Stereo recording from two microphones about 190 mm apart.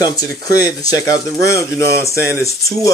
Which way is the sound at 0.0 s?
20° left (ahead or behind).